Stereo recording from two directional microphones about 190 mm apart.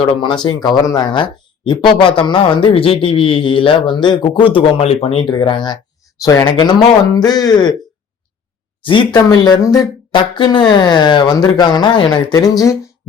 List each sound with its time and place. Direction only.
0.0 s speech: 25° left (ahead or behind)
8.8 s speech: 25° left (ahead or behind)